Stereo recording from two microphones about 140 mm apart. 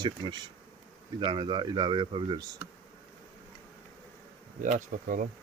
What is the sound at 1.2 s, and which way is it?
Speech, 35° right (ahead or behind).